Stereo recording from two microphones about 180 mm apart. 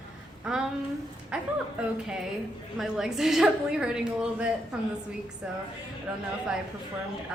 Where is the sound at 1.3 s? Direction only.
5° right (ahead or behind).